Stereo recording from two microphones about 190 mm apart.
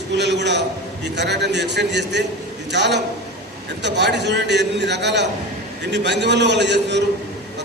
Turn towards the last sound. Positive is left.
turn(degrees=-65)  # may be behind; listen again after turning